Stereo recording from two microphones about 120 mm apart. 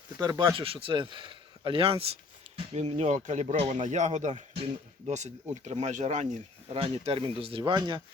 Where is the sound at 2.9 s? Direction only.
75° right (ahead or behind).